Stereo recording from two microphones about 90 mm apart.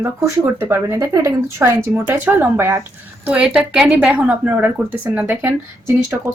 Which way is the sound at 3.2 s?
15° right (ahead or behind).